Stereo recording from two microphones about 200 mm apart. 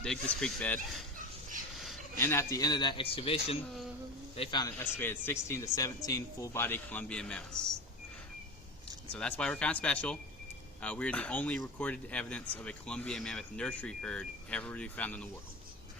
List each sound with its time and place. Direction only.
0.0 s speech: 5° left (ahead or behind)
2.1 s a man's voice: 15° left (ahead or behind)
9.1 s speech: 5° left (ahead or behind)